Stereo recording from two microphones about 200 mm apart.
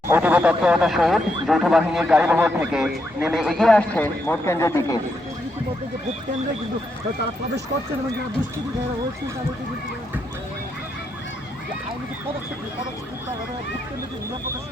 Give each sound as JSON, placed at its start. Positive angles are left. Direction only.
{"t": 0.1, "sound": "speech", "side_deg": -10}